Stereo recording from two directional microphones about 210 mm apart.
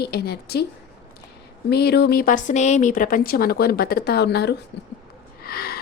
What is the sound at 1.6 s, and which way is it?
A woman's voice, 50° left (ahead or behind).